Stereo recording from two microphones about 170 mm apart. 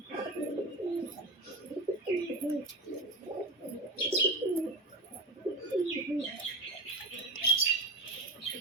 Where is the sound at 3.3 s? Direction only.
25° right (ahead or behind).